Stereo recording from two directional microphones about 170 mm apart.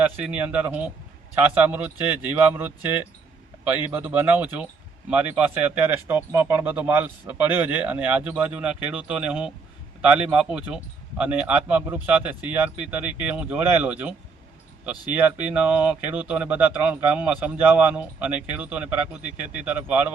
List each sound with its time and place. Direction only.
0.3 s speech: 10° right (ahead or behind)